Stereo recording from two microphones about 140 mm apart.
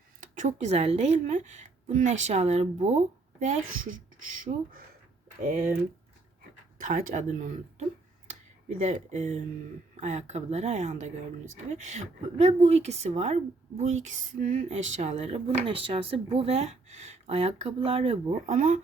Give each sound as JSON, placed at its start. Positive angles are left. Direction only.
{"t": 0.2, "sound": "a woman's voice", "side_deg": -60}
{"t": 3.4, "sound": "speech", "side_deg": -60}
{"t": 6.7, "sound": "a woman's voice", "side_deg": -65}
{"t": 18.5, "sound": "a woman's voice", "side_deg": -60}